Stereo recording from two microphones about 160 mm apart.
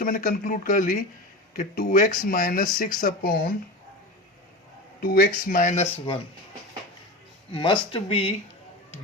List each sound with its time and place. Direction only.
0.0 s speech: 60° left (ahead or behind)
5.1 s speech: 65° left (ahead or behind); by 6.1 s 40° left (ahead or behind)
7.5 s speech: 30° left (ahead or behind)